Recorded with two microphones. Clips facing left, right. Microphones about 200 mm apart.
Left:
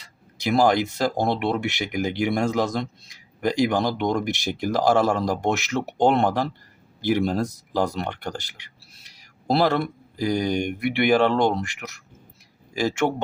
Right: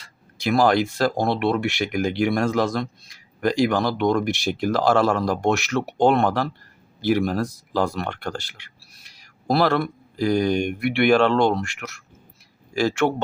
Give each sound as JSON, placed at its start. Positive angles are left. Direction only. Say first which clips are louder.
{"t": 0.4, "sound": "speech", "louder": "right 1 dB", "side_deg": 15}